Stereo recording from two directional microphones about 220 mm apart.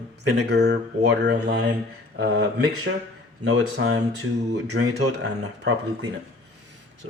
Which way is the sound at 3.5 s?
60° right (ahead or behind).